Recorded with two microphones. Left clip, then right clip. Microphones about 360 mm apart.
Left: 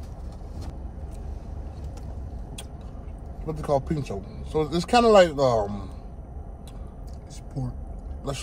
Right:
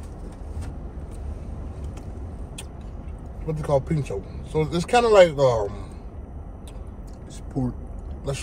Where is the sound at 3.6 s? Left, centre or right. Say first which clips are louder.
Right 2 dB; centre.